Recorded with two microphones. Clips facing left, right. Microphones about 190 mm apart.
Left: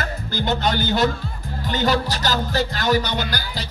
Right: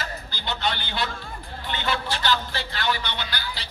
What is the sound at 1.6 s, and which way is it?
Music, 40° left (ahead or behind).